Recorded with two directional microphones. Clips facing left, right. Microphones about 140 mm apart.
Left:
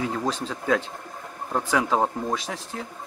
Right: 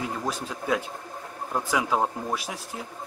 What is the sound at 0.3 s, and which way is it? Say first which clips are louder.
Speech: left 2 dB; 10° right (ahead or behind).